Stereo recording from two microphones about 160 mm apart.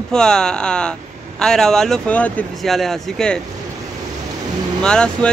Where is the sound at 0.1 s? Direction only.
5° left (ahead or behind).